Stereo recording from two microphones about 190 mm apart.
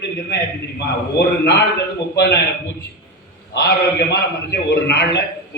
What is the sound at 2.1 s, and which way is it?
Speech, 60° left (ahead or behind).